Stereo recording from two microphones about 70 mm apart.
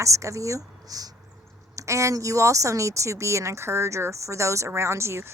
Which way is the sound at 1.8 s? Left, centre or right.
Right.